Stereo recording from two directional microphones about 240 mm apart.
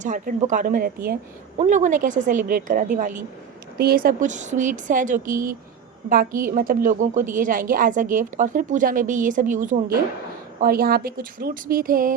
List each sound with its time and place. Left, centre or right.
0.0 s a woman's voice: right